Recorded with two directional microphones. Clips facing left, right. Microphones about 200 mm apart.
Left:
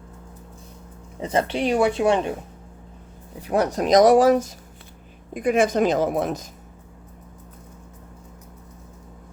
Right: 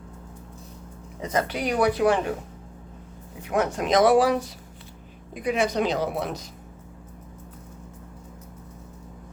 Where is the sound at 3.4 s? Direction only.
35° left (ahead or behind).